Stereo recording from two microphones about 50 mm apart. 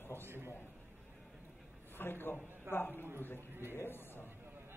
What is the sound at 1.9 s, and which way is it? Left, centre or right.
A man's voice, left.